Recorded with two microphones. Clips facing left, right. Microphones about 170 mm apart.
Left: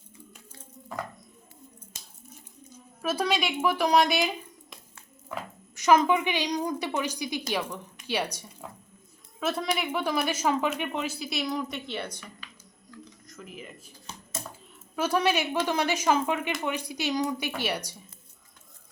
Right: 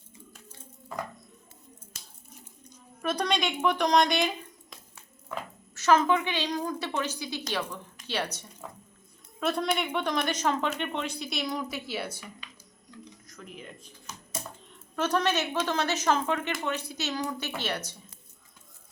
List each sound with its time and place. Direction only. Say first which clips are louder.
2.6 s a sound: left 1 dB; 5° left (ahead or behind)
5.7 s a woman's voice: left 2 dB; 15° left (ahead or behind)
9.4 s speech: right 1 dB; centre (ahead or behind)
12.9 s a sound: left 1 dB; 25° right (ahead or behind)
13.2 s speech: left 2 dB; centre (ahead or behind)
14.9 s a woman's voice: left 1 dB; 10° left (ahead or behind)